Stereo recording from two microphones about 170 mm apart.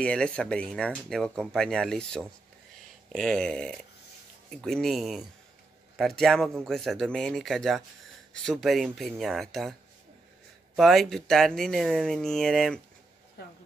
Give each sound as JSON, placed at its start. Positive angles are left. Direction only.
{"t": 0.0, "sound": "speech", "side_deg": 5}
{"t": 10.8, "sound": "speech", "side_deg": 0}
{"t": 13.4, "sound": "speech", "side_deg": 70}